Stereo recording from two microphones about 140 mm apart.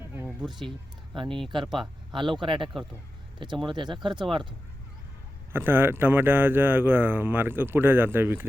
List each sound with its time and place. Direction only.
0.1 s a sound: 15° right (ahead or behind)
1.1 s speech: 40° right (ahead or behind)
5.5 s speech: 15° right (ahead or behind)